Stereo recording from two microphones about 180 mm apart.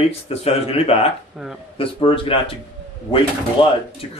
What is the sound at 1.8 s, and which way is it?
Speech, 30° left (ahead or behind).